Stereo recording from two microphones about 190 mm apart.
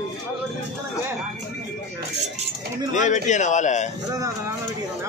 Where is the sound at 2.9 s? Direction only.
40° left (ahead or behind).